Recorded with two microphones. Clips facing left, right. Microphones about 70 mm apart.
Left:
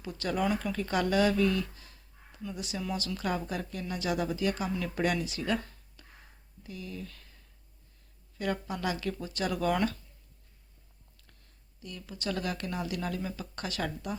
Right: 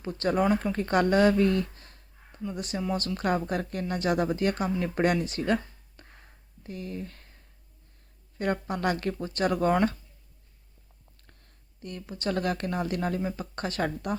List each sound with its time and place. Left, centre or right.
0.0 s speech: right
6.0 s a sound: right
8.4 s speech: right
11.8 s speech: right